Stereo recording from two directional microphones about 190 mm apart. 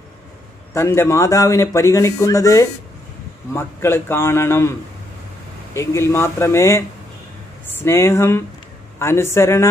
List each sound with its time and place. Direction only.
0.7 s speech: 15° left (ahead or behind)